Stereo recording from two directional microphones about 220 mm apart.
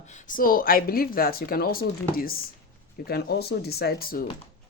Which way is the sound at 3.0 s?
45° left (ahead or behind).